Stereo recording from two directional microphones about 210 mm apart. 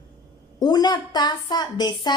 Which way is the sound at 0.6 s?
20° left (ahead or behind).